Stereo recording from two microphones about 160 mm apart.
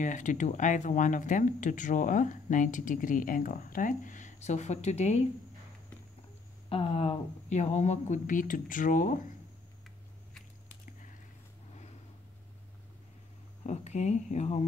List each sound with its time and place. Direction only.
0.0 s speech: 50° left (ahead or behind)
6.7 s speech: 35° left (ahead or behind); by 9.2 s 55° left (ahead or behind)
13.7 s speech: 45° left (ahead or behind)